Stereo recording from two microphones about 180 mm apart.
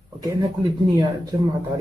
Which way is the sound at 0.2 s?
20° right (ahead or behind).